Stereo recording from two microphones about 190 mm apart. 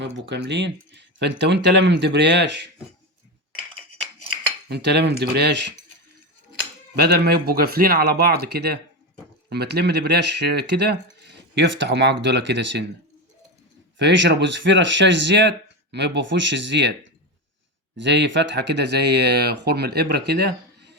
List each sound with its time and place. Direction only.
0.0 s speech: 65° right (ahead or behind)
4.7 s speech: 60° right (ahead or behind)
6.9 s speech: 60° right (ahead or behind)
14.0 s speech: 65° right (ahead or behind)